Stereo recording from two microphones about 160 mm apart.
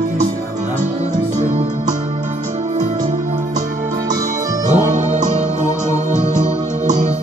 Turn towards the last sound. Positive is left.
turn(degrees=-50)  # may be behind; listen again after turning